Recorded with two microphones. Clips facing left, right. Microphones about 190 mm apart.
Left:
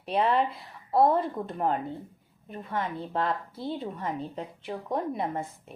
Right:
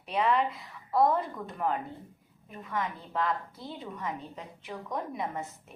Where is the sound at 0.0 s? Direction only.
35° left (ahead or behind).